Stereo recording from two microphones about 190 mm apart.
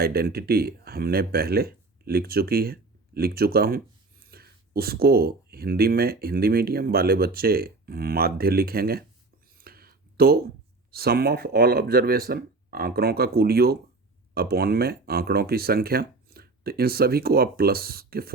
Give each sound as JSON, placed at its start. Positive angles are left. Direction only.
{"t": 0.0, "sound": "speech", "side_deg": -55}
{"t": 9.6, "sound": "a sound", "side_deg": -50}
{"t": 10.9, "sound": "speech", "side_deg": -55}